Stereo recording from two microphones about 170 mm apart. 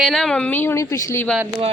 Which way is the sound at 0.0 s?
Centre (ahead or behind).